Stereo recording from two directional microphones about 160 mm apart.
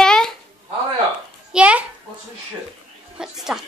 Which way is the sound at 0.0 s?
5° left (ahead or behind).